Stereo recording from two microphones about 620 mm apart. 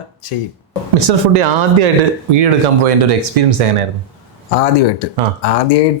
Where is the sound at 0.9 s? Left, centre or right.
Right.